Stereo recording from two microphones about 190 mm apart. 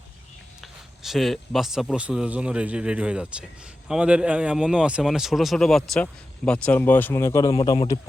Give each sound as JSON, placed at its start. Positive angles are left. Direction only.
{"t": 0.6, "sound": "a man's voice", "side_deg": 0}
{"t": 7.5, "sound": "a man's voice", "side_deg": 25}